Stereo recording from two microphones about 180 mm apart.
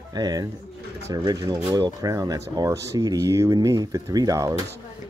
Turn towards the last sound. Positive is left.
turn(degrees=-20)  # may be behind; listen again after turning